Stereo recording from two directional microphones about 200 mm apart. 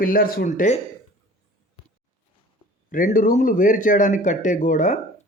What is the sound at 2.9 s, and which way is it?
A man's voice, 45° left (ahead or behind).